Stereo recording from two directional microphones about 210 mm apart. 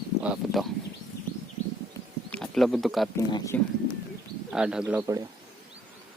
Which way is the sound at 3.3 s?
20° left (ahead or behind).